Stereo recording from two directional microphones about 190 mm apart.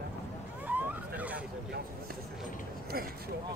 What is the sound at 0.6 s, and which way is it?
Vehicle, 10° right (ahead or behind).